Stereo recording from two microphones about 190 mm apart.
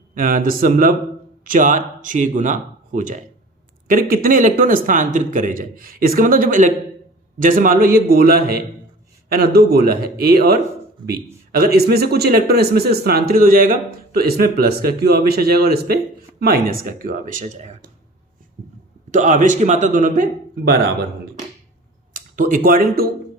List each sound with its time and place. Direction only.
0.1 s a man's voice: 45° right (ahead or behind)
19.1 s speech: 40° right (ahead or behind)
22.1 s speech: 45° right (ahead or behind)